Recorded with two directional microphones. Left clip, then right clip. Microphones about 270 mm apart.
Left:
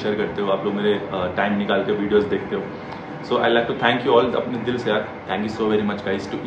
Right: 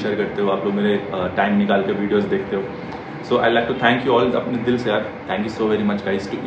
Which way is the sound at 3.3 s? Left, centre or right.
Centre.